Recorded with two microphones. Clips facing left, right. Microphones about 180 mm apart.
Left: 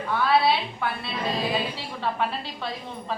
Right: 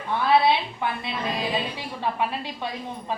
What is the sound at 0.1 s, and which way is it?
A woman's voice, 20° right (ahead or behind).